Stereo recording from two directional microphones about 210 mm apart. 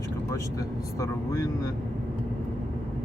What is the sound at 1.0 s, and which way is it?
Speech, 15° left (ahead or behind).